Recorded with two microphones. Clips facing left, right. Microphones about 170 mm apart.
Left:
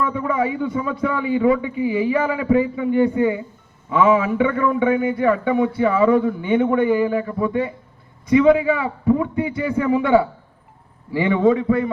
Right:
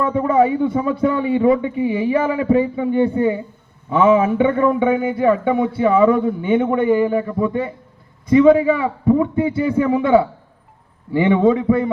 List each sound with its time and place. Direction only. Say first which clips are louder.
0.0 s a man's voice: right 5 dB; 30° right (ahead or behind)
11.3 s a man's voice: right 2 dB; 25° right (ahead or behind)